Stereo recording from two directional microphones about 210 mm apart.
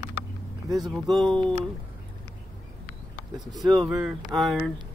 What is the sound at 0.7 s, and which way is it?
Speech, centre (ahead or behind).